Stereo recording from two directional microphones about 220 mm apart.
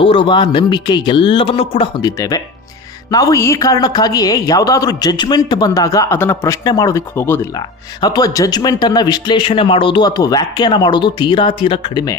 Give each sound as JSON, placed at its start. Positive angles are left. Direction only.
{"t": 0.0, "sound": "a woman's voice", "side_deg": 20}